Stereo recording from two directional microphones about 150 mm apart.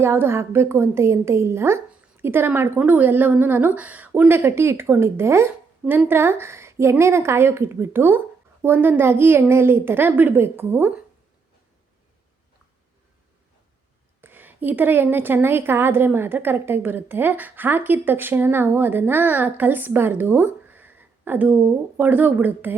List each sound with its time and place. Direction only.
0.0 s a woman's voice: 15° right (ahead or behind)
14.2 s a woman's voice: 15° right (ahead or behind)